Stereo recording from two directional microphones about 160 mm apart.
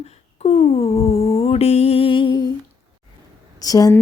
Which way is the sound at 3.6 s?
20° left (ahead or behind).